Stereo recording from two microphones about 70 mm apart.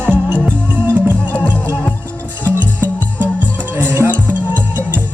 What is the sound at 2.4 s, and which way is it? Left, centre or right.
Music, right.